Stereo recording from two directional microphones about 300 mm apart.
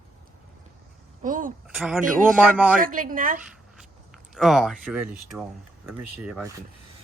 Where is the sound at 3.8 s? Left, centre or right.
Centre.